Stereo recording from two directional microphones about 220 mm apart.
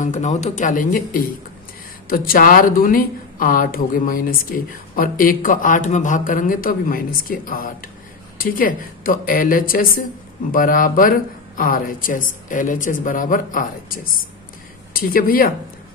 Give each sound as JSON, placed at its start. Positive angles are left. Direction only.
{"t": 0.0, "sound": "speech", "side_deg": 35}